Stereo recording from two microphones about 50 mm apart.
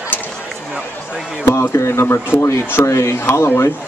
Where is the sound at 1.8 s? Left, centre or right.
Left.